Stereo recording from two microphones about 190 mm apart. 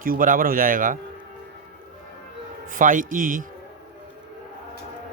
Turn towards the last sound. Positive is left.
turn(degrees=-45)  # may be behind; listen again after turning